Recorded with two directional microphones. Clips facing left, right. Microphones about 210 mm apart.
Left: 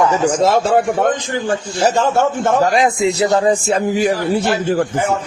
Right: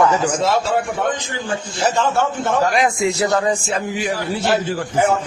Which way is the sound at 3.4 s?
35° left (ahead or behind).